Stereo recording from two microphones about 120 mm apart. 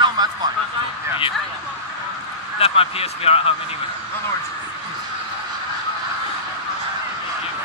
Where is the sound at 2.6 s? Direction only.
55° left (ahead or behind).